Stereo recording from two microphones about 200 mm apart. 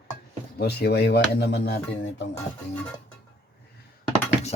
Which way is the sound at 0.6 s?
55° left (ahead or behind).